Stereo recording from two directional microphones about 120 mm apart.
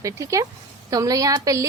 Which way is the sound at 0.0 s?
25° right (ahead or behind).